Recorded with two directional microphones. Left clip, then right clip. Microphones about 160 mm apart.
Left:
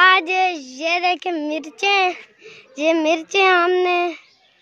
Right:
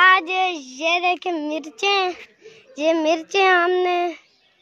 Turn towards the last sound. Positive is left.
turn(degrees=5)  # may be behind; listen again after turning